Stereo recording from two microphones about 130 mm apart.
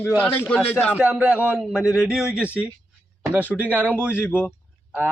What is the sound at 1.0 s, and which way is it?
A man's voice, 10° right (ahead or behind).